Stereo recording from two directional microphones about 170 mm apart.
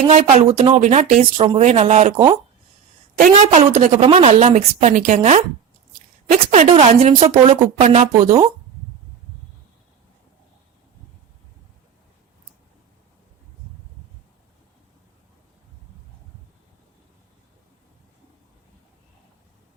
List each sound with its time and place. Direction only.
0.3 s a woman's voice: 40° right (ahead or behind)
2.1 s speech: 25° right (ahead or behind)
3.2 s a woman's voice: 40° right (ahead or behind)